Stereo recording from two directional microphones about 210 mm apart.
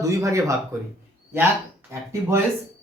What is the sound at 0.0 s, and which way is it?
Speech, 15° right (ahead or behind).